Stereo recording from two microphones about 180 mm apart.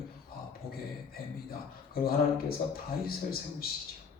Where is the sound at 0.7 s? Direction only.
55° left (ahead or behind).